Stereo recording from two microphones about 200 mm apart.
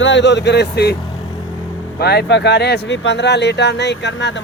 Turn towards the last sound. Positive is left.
turn(degrees=65)  # may be behind; listen again after turning